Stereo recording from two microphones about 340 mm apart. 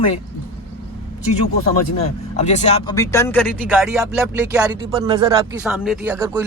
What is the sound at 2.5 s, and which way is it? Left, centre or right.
Speech, centre.